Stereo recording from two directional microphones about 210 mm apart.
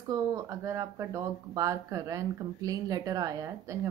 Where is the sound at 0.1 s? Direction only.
15° right (ahead or behind).